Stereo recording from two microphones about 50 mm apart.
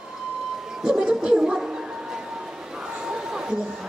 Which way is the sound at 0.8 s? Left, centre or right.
Centre.